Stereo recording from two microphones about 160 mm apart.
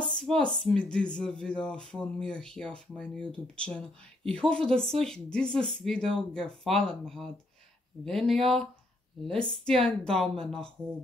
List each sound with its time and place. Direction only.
0.0 s speech: 5° left (ahead or behind)